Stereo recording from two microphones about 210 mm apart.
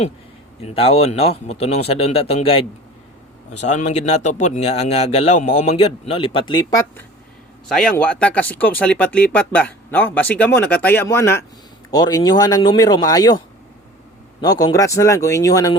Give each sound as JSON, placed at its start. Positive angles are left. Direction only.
{"t": 0.6, "sound": "a man's voice", "side_deg": 25}
{"t": 7.7, "sound": "a man's voice", "side_deg": 5}
{"t": 14.4, "sound": "speech", "side_deg": 20}